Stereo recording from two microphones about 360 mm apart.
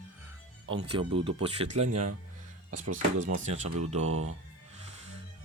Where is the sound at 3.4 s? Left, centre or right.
Centre.